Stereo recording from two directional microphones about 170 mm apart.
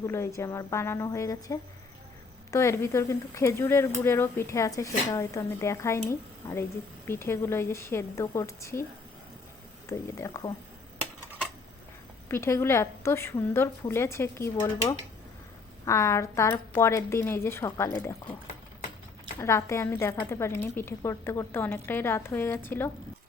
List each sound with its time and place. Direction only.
0.0 s speech: 15° left (ahead or behind)
9.9 s speech: 15° left (ahead or behind)
12.3 s speech: 15° left (ahead or behind)
19.4 s speech: 15° left (ahead or behind)